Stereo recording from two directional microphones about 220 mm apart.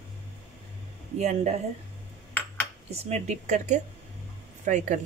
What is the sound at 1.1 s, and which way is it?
Speech, 30° right (ahead or behind).